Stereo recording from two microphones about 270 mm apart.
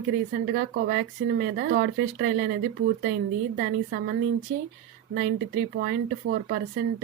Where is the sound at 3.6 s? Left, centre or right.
Right.